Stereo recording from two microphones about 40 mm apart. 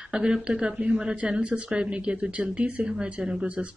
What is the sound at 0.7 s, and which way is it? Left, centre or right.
A man's voice, right.